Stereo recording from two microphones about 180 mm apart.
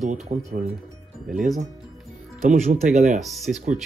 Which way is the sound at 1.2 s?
5° right (ahead or behind).